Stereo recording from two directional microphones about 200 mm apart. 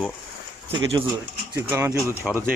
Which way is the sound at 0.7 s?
20° right (ahead or behind).